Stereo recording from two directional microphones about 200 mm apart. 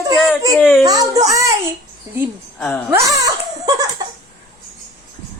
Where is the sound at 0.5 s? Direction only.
10° left (ahead or behind).